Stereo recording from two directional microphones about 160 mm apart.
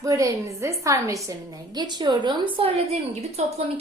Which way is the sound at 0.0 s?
20° right (ahead or behind).